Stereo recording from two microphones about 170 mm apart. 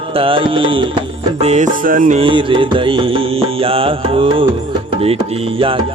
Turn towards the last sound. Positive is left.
turn(degrees=-30)  # may be behind; listen again after turning